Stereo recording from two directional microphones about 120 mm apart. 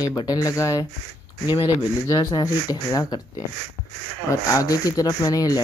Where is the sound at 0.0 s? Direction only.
35° left (ahead or behind).